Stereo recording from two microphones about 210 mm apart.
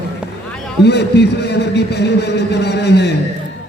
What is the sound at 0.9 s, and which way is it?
A man's voice, 55° left (ahead or behind).